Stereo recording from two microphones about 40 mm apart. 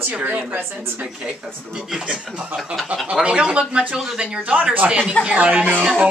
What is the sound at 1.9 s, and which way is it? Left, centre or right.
Speech, right.